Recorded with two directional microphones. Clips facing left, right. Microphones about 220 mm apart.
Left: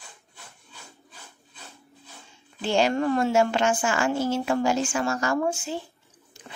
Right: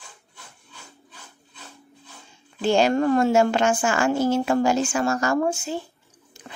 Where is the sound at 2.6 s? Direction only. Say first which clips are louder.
Right 4 dB; 45° right (ahead or behind).